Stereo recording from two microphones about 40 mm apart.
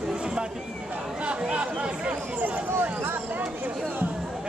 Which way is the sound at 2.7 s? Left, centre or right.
Right.